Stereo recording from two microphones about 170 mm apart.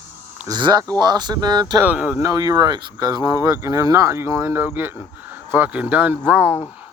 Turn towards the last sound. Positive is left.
turn(degrees=-10)  # may be behind; listen again after turning